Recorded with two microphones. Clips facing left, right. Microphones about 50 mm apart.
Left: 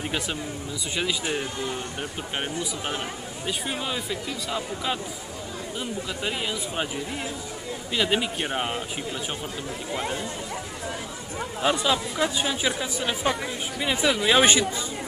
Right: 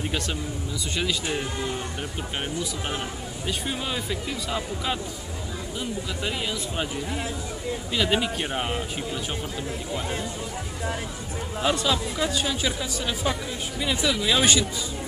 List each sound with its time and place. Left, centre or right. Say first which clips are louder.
0.9 s speech: even; centre
6.2 s speech: even; centre
7.9 s speech: even; centre
11.6 s speech: left 1 dB; centre